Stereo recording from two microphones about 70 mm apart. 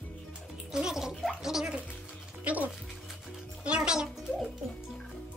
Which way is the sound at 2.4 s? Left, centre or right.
Right.